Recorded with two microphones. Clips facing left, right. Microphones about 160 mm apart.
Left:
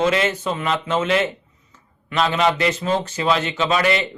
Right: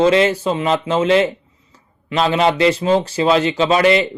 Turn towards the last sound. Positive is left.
turn(degrees=-30)  # may be behind; listen again after turning